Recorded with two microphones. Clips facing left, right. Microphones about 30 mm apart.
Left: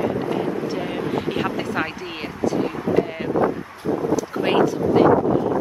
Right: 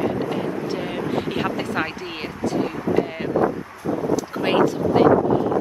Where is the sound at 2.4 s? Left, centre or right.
Centre.